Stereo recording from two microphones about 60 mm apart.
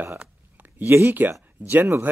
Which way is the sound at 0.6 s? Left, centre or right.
Right.